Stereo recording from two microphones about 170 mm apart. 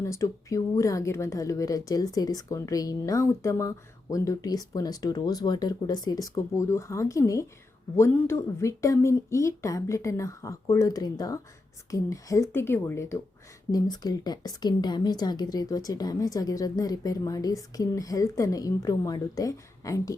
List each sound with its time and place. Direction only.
0.0 s a woman's voice: 15° left (ahead or behind)